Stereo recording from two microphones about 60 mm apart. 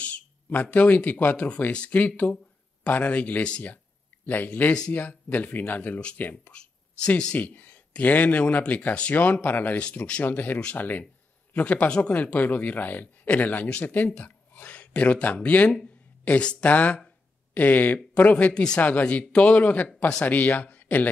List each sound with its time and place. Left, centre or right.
0.0 s speech: left
6.5 s a sound: centre
7.3 s speech: left
18.8 s speech: left